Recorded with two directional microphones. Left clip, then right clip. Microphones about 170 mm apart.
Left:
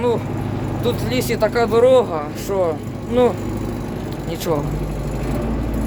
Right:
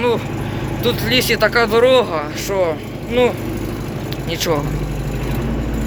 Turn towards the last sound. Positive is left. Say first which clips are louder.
# right 3 dB
turn(degrees=15)  # may be behind; listen again after turning